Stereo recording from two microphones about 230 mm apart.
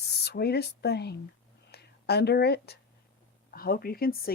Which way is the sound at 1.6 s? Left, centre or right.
Left.